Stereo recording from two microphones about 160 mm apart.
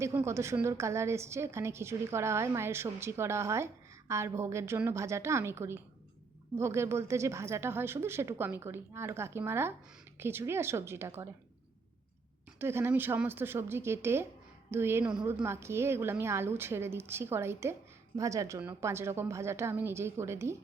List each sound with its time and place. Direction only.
0.0 s a woman's voice: 15° right (ahead or behind)
12.5 s a woman's voice: 15° right (ahead or behind)